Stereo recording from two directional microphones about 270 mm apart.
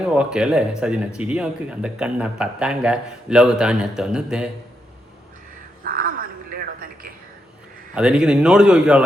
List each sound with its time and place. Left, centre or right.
0.1 s a man's voice: centre
5.8 s a sound: right
7.9 s a man's voice: centre